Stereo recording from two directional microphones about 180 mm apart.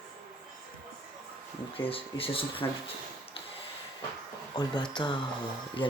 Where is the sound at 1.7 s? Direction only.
30° left (ahead or behind).